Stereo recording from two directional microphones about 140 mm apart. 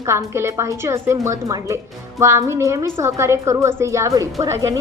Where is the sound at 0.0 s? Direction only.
20° right (ahead or behind).